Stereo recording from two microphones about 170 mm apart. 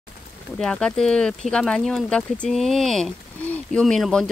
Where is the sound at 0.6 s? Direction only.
5° left (ahead or behind).